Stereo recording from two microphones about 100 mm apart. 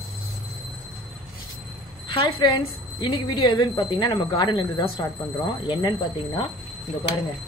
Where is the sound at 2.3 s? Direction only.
50° left (ahead or behind).